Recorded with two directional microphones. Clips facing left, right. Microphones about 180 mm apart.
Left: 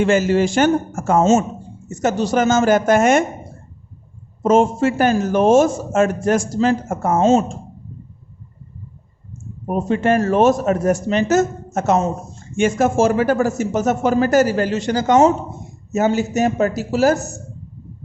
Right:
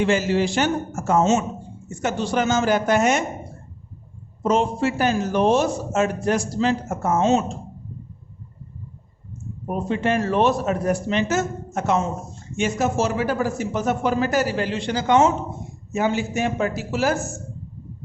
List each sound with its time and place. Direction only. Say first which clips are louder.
0.0 s a man's voice: left 4 dB; 50° left (ahead or behind)
1.9 s a man's voice: left 5 dB; 40° left (ahead or behind)
4.4 s a man's voice: left 6 dB; 50° left (ahead or behind)
7.2 s a man's voice: left 5 dB; 35° left (ahead or behind)
9.6 s a man's voice: left 5 dB; 45° left (ahead or behind)